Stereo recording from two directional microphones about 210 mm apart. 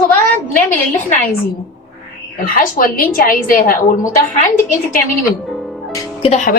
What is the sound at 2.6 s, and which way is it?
A woman's voice, 40° left (ahead or behind).